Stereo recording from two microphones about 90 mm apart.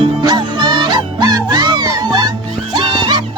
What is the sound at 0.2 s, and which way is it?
Music, 55° right (ahead or behind).